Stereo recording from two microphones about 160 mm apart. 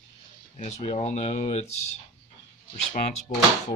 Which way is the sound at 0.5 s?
45° left (ahead or behind).